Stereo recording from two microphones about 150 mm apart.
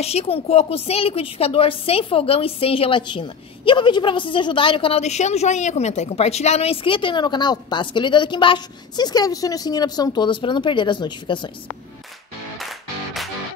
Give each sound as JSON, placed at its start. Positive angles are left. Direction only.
{"t": 0.0, "sound": "a woman's voice", "side_deg": 45}
{"t": 12.5, "sound": "music", "side_deg": 0}